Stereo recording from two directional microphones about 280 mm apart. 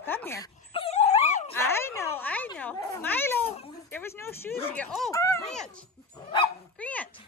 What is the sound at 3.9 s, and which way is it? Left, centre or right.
Speech, centre.